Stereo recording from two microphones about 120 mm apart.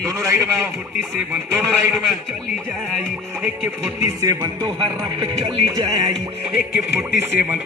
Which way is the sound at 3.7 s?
20° right (ahead or behind).